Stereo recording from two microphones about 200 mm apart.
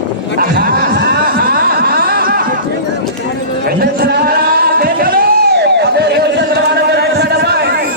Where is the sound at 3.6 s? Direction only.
50° right (ahead or behind).